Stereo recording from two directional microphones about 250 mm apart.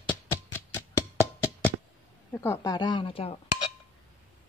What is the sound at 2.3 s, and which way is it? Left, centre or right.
Speech, centre.